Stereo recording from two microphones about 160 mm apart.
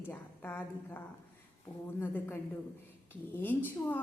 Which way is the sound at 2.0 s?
10° left (ahead or behind).